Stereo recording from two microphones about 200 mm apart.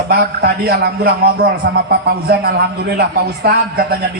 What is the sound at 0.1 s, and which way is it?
A man's voice, 50° right (ahead or behind).